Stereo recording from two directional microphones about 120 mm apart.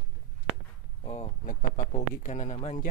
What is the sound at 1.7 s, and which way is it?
Speech, 90° left.